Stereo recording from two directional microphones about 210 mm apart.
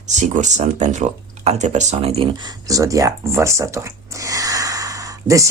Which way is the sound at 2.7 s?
15° right (ahead or behind).